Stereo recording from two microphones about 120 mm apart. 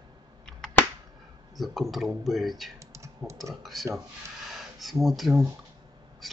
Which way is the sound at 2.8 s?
25° right (ahead or behind).